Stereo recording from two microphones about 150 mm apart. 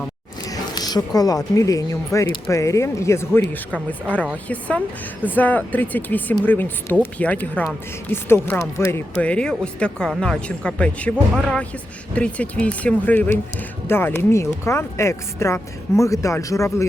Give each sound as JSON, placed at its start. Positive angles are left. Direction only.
{"t": 0.4, "sound": "speech", "side_deg": 25}